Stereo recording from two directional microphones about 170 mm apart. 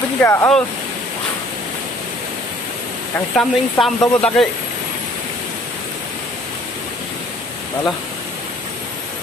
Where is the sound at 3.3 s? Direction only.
Centre (ahead or behind).